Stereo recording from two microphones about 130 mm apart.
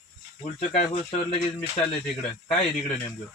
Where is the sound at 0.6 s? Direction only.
60° left (ahead or behind).